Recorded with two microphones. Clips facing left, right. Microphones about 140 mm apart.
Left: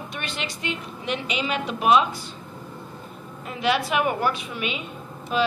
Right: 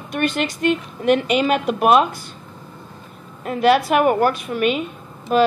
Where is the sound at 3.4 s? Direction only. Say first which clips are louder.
Right 8 dB; 50° right (ahead or behind).